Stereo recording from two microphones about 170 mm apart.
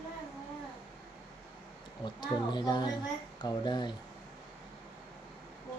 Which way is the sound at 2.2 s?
25° left (ahead or behind).